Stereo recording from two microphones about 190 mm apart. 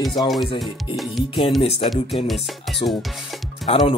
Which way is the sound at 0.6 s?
Centre (ahead or behind).